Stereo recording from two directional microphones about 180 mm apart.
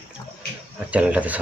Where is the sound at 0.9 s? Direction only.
10° right (ahead or behind).